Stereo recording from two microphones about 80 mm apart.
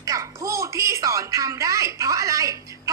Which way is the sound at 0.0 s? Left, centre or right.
Right.